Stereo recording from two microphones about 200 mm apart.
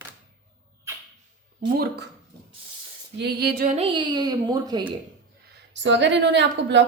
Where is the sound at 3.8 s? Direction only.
20° right (ahead or behind).